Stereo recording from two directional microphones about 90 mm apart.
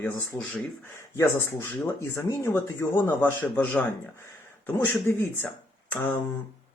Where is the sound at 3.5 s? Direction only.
15° left (ahead or behind).